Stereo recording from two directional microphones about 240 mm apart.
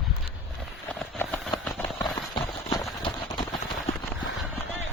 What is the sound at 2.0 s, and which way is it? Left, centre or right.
Run, centre.